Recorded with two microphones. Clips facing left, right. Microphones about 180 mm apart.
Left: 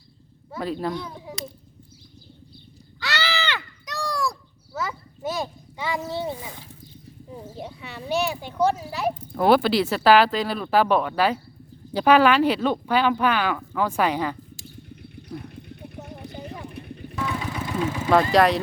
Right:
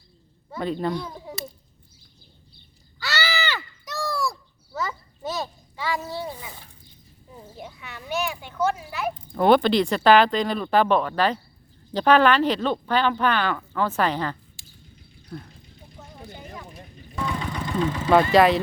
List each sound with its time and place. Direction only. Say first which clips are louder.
0.5 s speech: right 1 dB; 5° left (ahead or behind)
3.0 s a sound: even; 5° right (ahead or behind); by 6.5 s 25° left (ahead or behind)
7.5 s speech: left 1 dB; 30° left (ahead or behind)
9.3 s speech: right 1 dB; 5° left (ahead or behind)
15.4 s a sound: left 10 dB; 65° left (ahead or behind)
16.6 s vehicle: left 7 dB; 65° left (ahead or behind)
17.2 s vehicle: even; 5° left (ahead or behind)
18.1 s speech: right 1 dB; 5° right (ahead or behind)